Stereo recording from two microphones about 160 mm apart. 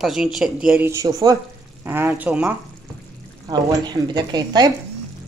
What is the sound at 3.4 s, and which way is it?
A woman's voice, 20° right (ahead or behind).